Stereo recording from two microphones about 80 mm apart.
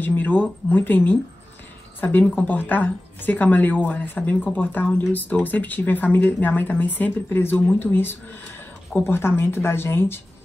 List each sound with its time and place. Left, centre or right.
0.0 s speech: left